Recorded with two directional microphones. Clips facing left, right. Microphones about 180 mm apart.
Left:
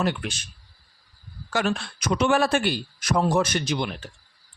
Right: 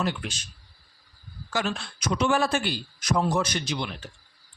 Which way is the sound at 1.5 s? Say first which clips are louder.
Left 4 dB; 55° left (ahead or behind).